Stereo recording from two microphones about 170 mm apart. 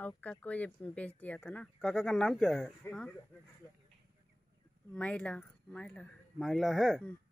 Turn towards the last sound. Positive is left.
turn(degrees=0)  # may be behind; listen again after turning